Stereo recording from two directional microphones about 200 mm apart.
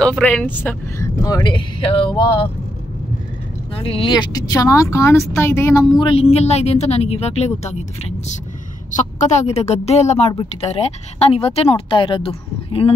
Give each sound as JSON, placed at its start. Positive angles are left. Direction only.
{"t": 0.0, "sound": "speech", "side_deg": 5}
{"t": 3.7, "sound": "speech", "side_deg": 25}
{"t": 5.9, "sound": "a woman's voice", "side_deg": 30}
{"t": 8.9, "sound": "a woman's voice", "side_deg": 35}